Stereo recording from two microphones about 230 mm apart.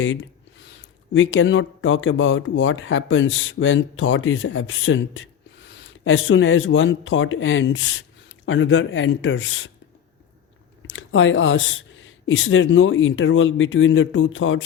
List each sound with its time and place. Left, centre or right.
1.1 s speech: left
10.9 s speech: left